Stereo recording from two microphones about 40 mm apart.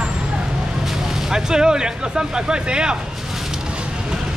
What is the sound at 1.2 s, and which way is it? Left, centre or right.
Speech, centre.